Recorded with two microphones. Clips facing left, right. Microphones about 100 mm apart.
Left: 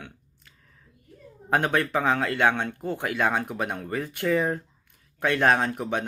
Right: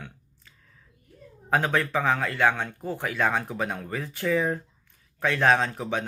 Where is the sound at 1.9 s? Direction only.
15° left (ahead or behind).